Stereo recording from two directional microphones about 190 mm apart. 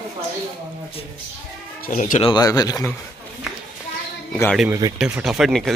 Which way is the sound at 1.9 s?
45° left (ahead or behind).